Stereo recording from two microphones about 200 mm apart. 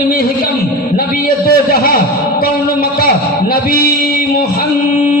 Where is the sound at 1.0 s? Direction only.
50° left (ahead or behind).